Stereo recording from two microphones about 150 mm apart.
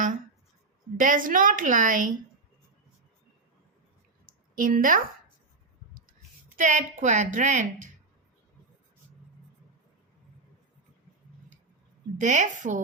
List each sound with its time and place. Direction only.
0.9 s a woman's voice: 60° right (ahead or behind)
4.5 s speech: 65° right (ahead or behind)
6.6 s a woman's voice: 55° right (ahead or behind)
12.1 s a woman's voice: 55° right (ahead or behind)